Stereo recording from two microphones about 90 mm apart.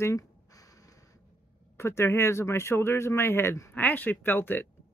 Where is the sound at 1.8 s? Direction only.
30° left (ahead or behind).